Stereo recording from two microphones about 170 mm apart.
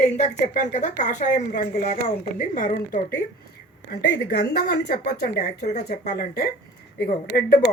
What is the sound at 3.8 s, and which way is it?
Speech, 70° left (ahead or behind).